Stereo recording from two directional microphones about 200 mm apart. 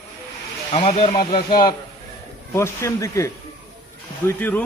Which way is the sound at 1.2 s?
45° left (ahead or behind).